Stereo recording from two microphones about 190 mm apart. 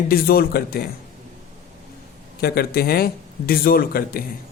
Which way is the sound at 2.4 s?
55° left (ahead or behind).